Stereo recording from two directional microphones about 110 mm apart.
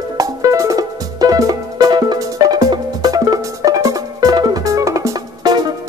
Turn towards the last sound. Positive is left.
turn(degrees=-35)  # may be behind; listen again after turning